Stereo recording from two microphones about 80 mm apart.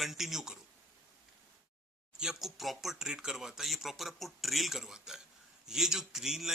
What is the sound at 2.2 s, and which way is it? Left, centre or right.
A man's voice, centre.